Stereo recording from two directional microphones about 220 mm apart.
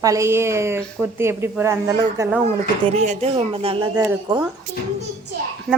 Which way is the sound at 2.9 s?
30° right (ahead or behind).